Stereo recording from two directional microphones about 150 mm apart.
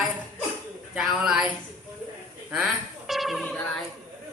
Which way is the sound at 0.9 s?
5° right (ahead or behind).